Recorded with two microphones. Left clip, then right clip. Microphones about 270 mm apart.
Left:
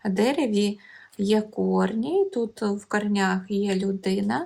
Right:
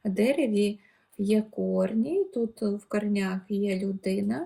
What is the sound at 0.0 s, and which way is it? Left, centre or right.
Speech, centre.